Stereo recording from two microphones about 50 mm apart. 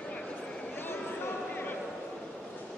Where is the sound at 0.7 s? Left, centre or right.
Left.